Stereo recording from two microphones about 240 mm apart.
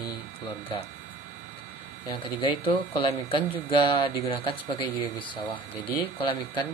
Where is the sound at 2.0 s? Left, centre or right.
Left.